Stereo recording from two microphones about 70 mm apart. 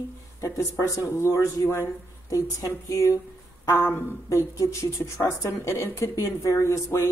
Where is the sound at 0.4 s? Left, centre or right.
Left.